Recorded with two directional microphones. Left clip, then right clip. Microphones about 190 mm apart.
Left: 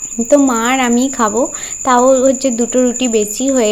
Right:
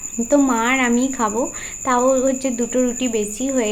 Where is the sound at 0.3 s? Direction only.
25° left (ahead or behind).